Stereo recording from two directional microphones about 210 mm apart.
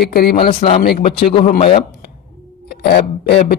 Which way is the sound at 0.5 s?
30° left (ahead or behind).